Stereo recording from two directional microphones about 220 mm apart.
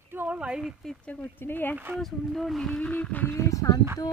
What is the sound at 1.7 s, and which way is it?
Speech, 5° right (ahead or behind).